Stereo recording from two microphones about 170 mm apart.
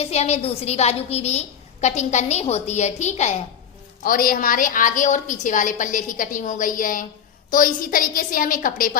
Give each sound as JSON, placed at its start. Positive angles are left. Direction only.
{"t": 0.0, "sound": "a woman's voice", "side_deg": 40}
{"t": 4.0, "sound": "a woman's voice", "side_deg": 60}